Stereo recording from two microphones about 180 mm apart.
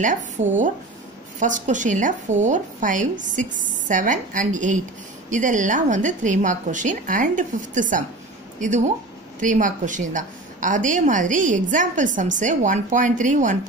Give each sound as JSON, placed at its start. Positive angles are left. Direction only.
{"t": 0.0, "sound": "a woman's voice", "side_deg": -45}